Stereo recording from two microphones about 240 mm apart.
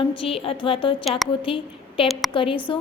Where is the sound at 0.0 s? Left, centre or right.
Left.